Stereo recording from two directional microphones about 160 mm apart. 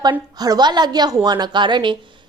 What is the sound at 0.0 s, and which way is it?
A woman's voice, 25° right (ahead or behind).